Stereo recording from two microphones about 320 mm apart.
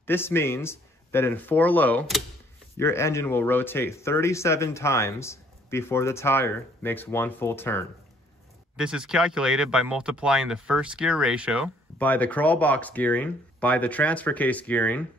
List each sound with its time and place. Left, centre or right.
0.0 s speech: centre